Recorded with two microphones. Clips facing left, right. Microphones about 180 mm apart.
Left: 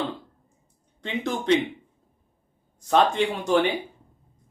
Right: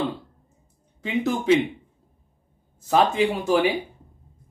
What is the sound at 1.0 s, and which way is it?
Speech, 5° right (ahead or behind).